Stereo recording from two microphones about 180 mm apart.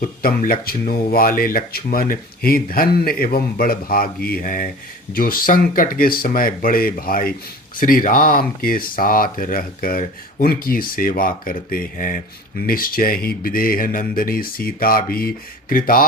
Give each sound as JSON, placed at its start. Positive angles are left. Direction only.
{"t": 0.0, "sound": "speech", "side_deg": 55}